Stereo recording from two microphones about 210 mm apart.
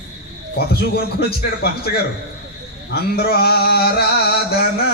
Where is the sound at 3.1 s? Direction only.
50° left (ahead or behind).